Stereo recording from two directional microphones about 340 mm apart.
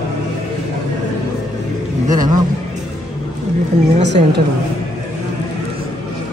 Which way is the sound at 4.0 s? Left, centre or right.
Right.